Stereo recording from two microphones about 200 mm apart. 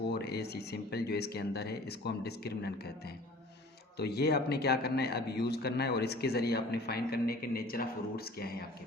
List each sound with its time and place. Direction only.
0.1 s a man's voice: 55° left (ahead or behind)